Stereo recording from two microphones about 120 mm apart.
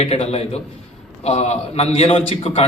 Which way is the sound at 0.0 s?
55° left (ahead or behind).